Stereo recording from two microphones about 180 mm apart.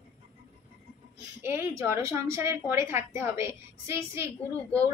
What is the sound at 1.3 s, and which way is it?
A woman's voice, 15° right (ahead or behind).